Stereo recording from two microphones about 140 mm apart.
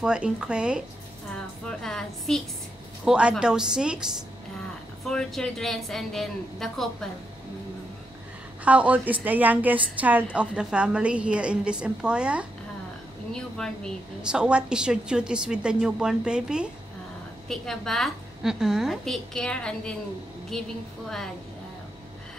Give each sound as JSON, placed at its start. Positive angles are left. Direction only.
{"t": 0.0, "sound": "a woman's voice", "side_deg": -5}
{"t": 1.3, "sound": "a woman's voice", "side_deg": 5}
{"t": 8.6, "sound": "a woman's voice", "side_deg": -10}
{"t": 13.3, "sound": "a woman's voice", "side_deg": 5}
{"t": 14.3, "sound": "a woman's voice", "side_deg": -5}